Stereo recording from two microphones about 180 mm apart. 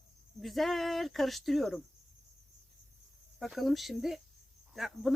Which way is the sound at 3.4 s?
Centre (ahead or behind).